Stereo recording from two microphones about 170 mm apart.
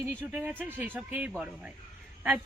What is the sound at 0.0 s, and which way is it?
Speech, 15° right (ahead or behind).